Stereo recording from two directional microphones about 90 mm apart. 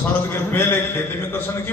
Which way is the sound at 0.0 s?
25° left (ahead or behind).